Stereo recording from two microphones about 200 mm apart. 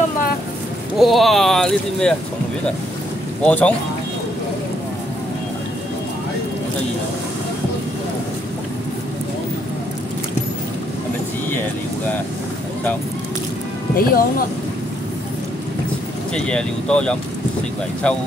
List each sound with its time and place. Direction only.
0.9 s speech: centre (ahead or behind)
3.4 s speech: 5° left (ahead or behind)
13.9 s speech: 45° left (ahead or behind)
16.3 s speech: 5° left (ahead or behind)